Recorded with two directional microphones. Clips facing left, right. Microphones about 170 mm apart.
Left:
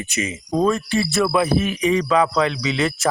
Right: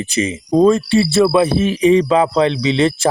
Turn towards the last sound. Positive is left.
turn(degrees=-30)  # may be behind; listen again after turning